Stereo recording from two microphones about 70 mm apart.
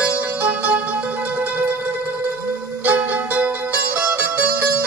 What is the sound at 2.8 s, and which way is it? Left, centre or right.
Music, right.